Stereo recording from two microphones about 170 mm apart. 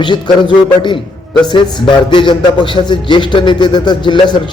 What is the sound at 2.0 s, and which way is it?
A man's voice, 30° left (ahead or behind).